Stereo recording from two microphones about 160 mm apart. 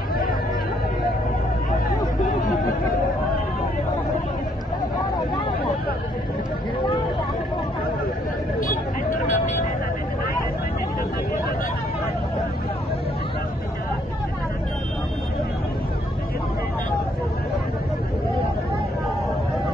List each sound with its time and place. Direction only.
0.1 s chatter: 65° left (ahead or behind)
8.5 s vehicle: 60° left (ahead or behind)